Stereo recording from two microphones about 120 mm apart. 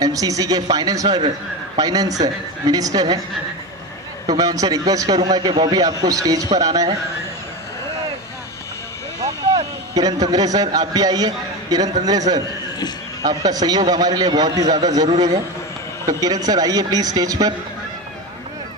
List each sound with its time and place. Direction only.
0.0 s a man's voice: 30° right (ahead or behind)
4.3 s a man's voice: 30° right (ahead or behind)
9.2 s a man's voice: 35° right (ahead or behind)
16.1 s a man's voice: 30° right (ahead or behind)